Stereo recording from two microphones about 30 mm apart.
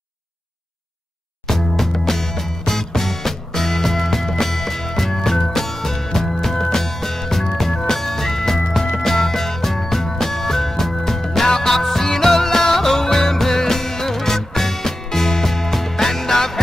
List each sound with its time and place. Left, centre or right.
1.5 s music: centre